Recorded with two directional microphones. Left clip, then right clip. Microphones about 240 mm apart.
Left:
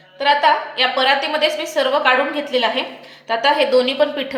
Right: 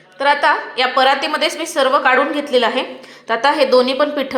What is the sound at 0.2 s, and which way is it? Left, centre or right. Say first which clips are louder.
A woman's voice: even; right.